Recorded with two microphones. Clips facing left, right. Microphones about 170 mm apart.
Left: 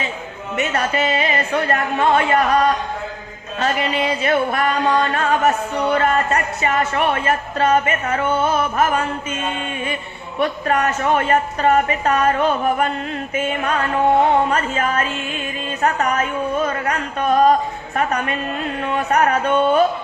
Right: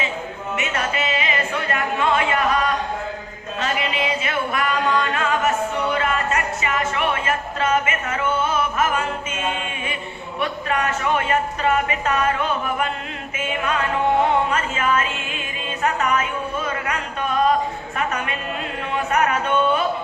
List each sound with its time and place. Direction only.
0.5 s speech: 35° left (ahead or behind)
3.6 s a sound: 40° left (ahead or behind)
8.7 s a woman's voice: 40° left (ahead or behind)
10.4 s a woman's voice: 40° left (ahead or behind)